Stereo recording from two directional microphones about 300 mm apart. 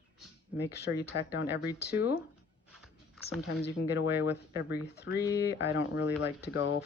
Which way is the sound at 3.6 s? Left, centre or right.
Left.